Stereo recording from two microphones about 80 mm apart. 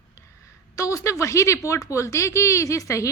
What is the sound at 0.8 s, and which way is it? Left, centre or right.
Speech, left.